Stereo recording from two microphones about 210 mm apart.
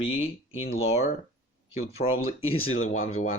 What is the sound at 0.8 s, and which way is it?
Speech, 75° left (ahead or behind).